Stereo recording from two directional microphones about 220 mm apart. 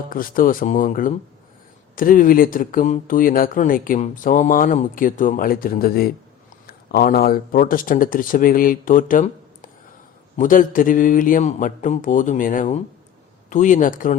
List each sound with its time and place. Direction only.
0.1 s speech: 40° left (ahead or behind)